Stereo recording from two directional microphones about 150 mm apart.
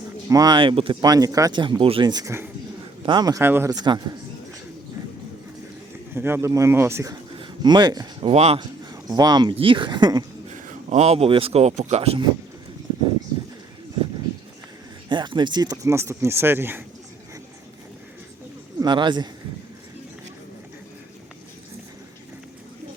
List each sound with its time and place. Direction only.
0.3 s speech: 25° right (ahead or behind)
6.1 s speech: 15° right (ahead or behind)
7.3 s a sound: 30° right (ahead or behind)
8.3 s speech: 45° right (ahead or behind)
9.0 s speech: 25° right (ahead or behind)
10.5 s speech: 50° right (ahead or behind)
15.1 s speech: 30° right (ahead or behind); by 16.8 s 15° right (ahead or behind)
18.8 s speech: 30° right (ahead or behind)